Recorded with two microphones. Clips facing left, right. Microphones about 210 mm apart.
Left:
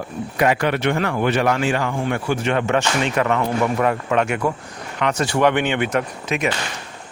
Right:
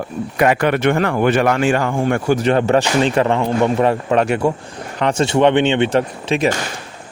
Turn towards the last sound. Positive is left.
turn(degrees=-30)  # may be behind; listen again after turning